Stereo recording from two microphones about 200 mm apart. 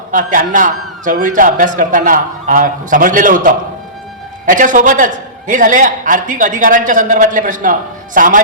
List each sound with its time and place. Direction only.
0.1 s a man's voice: 40° right (ahead or behind)